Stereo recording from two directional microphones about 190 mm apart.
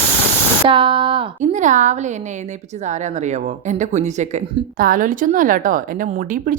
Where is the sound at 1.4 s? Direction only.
40° right (ahead or behind).